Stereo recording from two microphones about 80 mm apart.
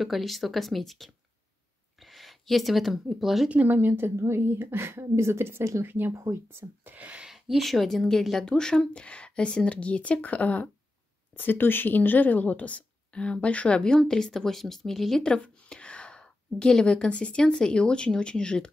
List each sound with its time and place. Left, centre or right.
0.0 s speech: centre
3.4 s a woman's voice: right
7.2 s a woman's voice: centre